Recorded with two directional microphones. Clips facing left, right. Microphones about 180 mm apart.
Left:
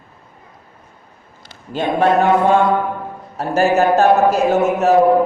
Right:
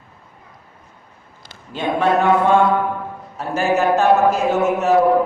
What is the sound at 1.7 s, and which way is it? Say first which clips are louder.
Speech: left 3 dB; 40° left (ahead or behind).